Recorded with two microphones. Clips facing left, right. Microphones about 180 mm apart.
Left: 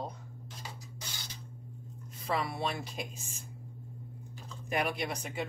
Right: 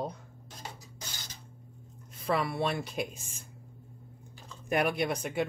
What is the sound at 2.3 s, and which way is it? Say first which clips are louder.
Speech: right 3 dB; 60° right (ahead or behind).